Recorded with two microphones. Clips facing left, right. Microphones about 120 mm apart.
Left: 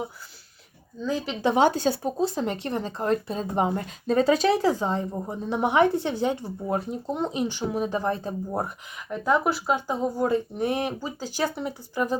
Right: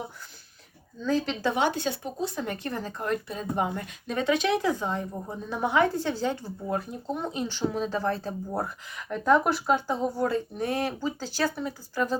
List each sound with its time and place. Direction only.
1.0 s speech: 10° left (ahead or behind)
1.5 s speech: 35° left (ahead or behind); by 9.1 s 15° left (ahead or behind)
9.1 s speech: 5° left (ahead or behind)
9.7 s speech: 15° left (ahead or behind)